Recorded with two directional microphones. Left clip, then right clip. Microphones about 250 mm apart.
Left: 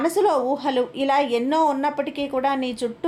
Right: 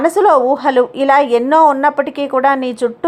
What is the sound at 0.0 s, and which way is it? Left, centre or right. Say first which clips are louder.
A woman's voice: right 9 dB; centre.